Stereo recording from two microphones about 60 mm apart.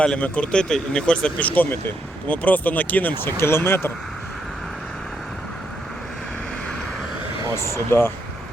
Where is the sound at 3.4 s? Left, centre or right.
Left.